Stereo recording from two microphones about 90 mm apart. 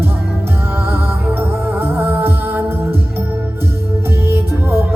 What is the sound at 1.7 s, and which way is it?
Music, 25° right (ahead or behind).